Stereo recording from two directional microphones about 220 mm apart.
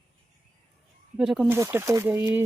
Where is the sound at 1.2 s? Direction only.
5° right (ahead or behind).